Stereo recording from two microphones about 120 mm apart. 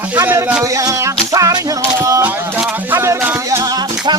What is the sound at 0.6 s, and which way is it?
Music, 30° right (ahead or behind).